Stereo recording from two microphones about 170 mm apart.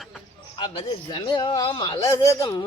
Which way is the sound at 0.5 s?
25° left (ahead or behind).